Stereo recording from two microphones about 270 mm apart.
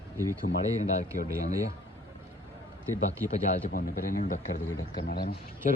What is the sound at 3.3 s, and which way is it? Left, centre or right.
Speech, left.